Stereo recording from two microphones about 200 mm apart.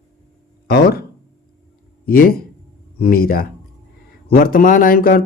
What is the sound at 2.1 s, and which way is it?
Speech, 45° left (ahead or behind).